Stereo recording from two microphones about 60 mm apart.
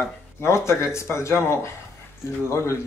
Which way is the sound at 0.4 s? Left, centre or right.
Left.